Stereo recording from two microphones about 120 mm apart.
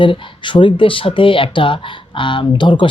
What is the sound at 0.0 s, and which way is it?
Speech, 45° left (ahead or behind).